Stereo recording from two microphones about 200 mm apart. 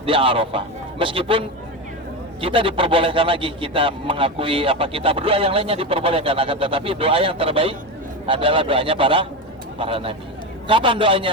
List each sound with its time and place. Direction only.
0.0 s a man's voice: 25° right (ahead or behind)